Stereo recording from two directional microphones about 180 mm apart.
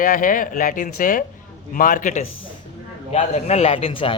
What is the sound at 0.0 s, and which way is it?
A man's voice, 50° left (ahead or behind).